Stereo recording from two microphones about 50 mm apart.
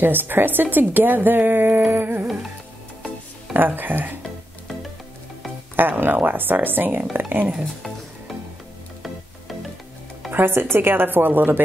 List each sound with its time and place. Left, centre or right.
0.0 s speech: right
1.9 s music: right
3.5 s speech: right
5.8 s speech: right
10.3 s speech: right